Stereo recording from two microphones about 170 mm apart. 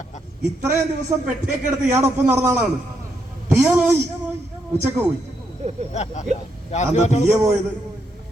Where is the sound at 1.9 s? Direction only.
15° right (ahead or behind).